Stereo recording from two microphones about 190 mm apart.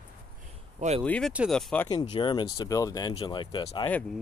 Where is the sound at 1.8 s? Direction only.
25° left (ahead or behind).